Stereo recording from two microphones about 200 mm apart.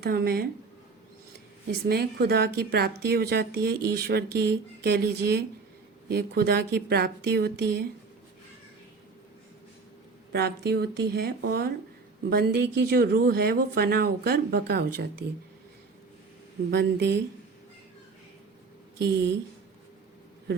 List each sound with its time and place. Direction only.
0.0 s speech: 55° right (ahead or behind)
1.7 s speech: 50° right (ahead or behind)
10.3 s speech: 55° right (ahead or behind)
16.7 s speech: 60° right (ahead or behind)
18.9 s speech: 55° right (ahead or behind)